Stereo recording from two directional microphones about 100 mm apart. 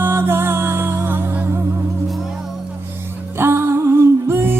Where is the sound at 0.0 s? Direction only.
25° right (ahead or behind).